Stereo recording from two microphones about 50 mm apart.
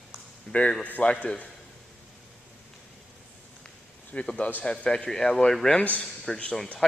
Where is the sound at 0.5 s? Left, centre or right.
Left.